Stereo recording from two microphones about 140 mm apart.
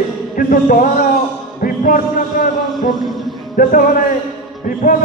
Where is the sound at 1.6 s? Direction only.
80° left.